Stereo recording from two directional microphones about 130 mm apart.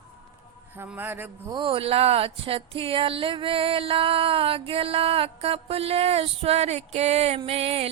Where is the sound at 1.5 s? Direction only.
40° right (ahead or behind).